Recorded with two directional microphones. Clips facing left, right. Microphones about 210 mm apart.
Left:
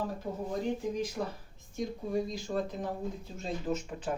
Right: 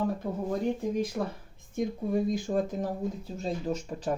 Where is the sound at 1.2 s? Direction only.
50° right (ahead or behind).